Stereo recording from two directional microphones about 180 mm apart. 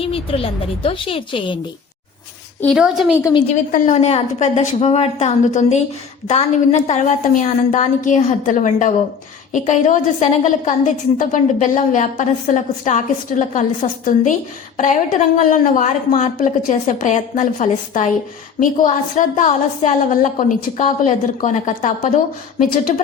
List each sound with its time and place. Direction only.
0.0 s a woman's voice: 30° left (ahead or behind)
2.6 s a woman's voice: centre (ahead or behind)
3.5 s a woman's voice: 45° left (ahead or behind)